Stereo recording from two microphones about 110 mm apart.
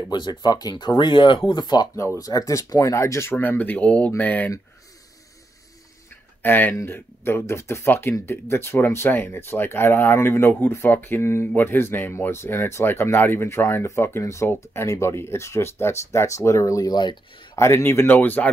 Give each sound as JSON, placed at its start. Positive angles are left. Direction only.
{"t": 0.1, "sound": "speech", "side_deg": 40}
{"t": 6.4, "sound": "speech", "side_deg": 20}
{"t": 17.6, "sound": "speech", "side_deg": 25}